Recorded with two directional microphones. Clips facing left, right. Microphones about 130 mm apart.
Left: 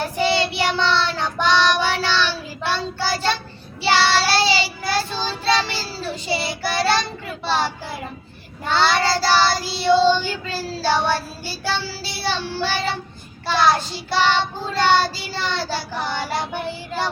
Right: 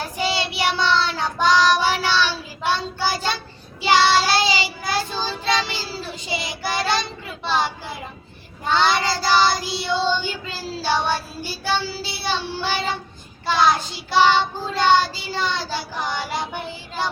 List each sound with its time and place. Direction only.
0.2 s child singing: 15° right (ahead or behind)
8.7 s child singing: 15° right (ahead or behind)